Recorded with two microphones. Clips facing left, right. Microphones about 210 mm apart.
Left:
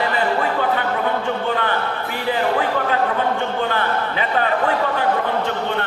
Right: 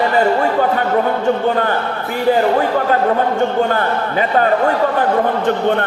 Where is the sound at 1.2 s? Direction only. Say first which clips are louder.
Right 6 dB; 45° right (ahead or behind).